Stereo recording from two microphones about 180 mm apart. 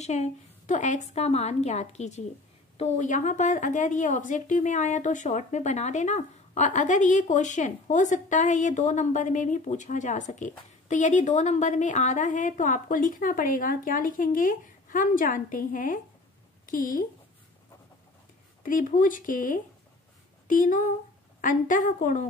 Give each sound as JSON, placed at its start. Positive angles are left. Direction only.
{"t": 0.0, "sound": "a woman's voice", "side_deg": 40}
{"t": 18.6, "sound": "a woman's voice", "side_deg": 45}